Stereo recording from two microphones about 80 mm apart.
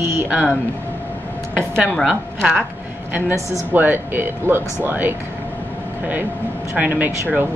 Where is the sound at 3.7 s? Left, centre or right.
Right.